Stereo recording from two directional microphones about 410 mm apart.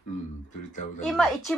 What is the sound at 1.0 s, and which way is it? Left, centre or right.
Speech, centre.